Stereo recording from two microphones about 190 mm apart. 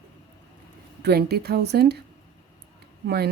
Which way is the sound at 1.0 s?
60° right (ahead or behind).